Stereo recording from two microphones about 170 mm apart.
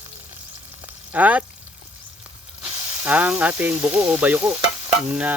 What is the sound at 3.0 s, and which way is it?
Sizzle, 10° right (ahead or behind).